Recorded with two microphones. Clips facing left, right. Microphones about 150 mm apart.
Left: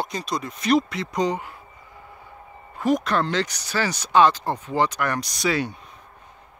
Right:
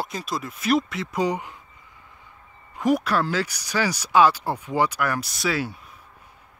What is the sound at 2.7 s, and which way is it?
Speech, 10° right (ahead or behind).